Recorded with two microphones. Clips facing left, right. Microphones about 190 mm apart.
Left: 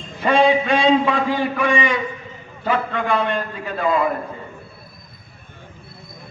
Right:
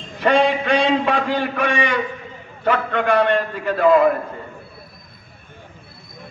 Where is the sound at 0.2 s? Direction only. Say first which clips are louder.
Left 1 dB; 70° right (ahead or behind).